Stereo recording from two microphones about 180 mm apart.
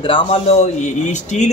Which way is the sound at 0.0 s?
30° left (ahead or behind).